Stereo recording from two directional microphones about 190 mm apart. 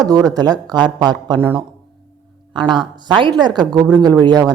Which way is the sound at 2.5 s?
25° right (ahead or behind).